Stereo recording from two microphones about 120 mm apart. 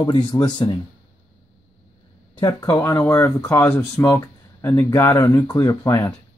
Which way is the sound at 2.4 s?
35° left (ahead or behind).